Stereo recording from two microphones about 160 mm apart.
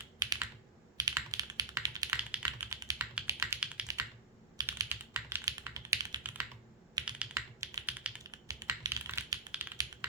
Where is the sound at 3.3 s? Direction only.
15° right (ahead or behind).